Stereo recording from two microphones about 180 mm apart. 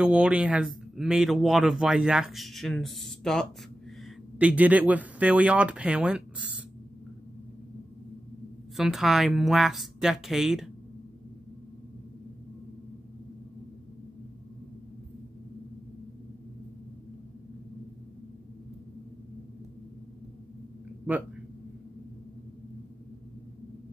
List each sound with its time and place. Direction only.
0.0 s speech: 5° right (ahead or behind)
8.7 s speech: centre (ahead or behind)